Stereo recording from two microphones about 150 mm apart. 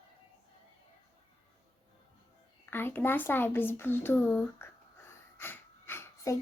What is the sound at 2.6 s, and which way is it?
Speech, 15° left (ahead or behind).